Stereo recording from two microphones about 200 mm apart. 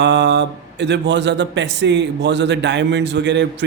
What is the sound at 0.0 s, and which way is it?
Speech, 60° right (ahead or behind).